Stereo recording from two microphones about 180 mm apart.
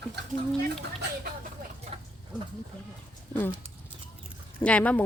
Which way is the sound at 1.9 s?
30° right (ahead or behind).